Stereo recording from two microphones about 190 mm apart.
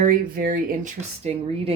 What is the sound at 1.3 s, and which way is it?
Speech, 35° right (ahead or behind).